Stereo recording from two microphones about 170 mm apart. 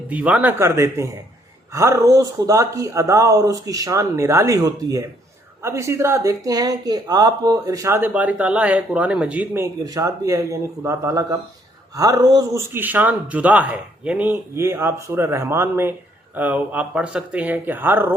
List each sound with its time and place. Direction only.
0.1 s speech: 10° right (ahead or behind)